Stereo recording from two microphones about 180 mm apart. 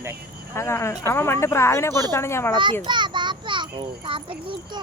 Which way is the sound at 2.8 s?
25° right (ahead or behind).